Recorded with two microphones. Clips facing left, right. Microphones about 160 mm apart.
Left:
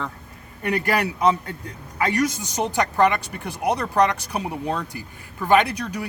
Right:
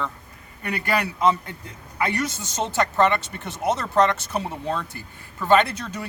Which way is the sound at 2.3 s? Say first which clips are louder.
Left 3 dB; 15° left (ahead or behind).